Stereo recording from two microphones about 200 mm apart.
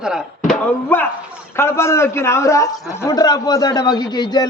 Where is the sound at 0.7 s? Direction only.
10° left (ahead or behind).